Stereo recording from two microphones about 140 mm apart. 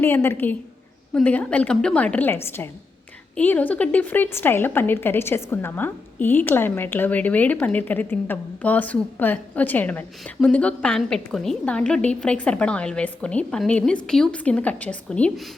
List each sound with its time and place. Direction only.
0.0 s a woman's voice: 15° left (ahead or behind)